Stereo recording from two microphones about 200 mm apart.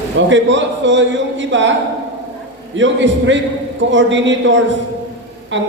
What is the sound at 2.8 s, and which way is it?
A man's voice, 65° right (ahead or behind).